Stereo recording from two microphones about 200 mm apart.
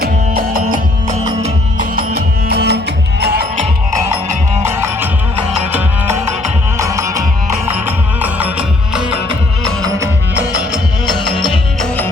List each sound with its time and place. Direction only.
0.0 s music: 45° right (ahead or behind)
6.7 s music: 15° right (ahead or behind)
11.0 s music: 25° left (ahead or behind)
11.8 s music: 10° left (ahead or behind)